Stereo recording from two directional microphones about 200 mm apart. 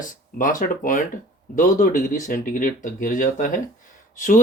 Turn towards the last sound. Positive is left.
turn(degrees=40)  # may be behind; listen again after turning